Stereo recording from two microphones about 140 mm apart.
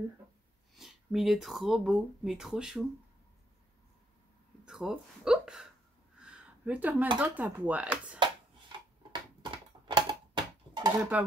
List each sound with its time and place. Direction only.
0.7 s speech: centre (ahead or behind)
4.6 s speech: 5° right (ahead or behind)
6.1 s a sound: 10° right (ahead or behind)
7.2 s speech: 15° right (ahead or behind)
8.7 s a sound: 35° right (ahead or behind)
10.9 s speech: 10° right (ahead or behind)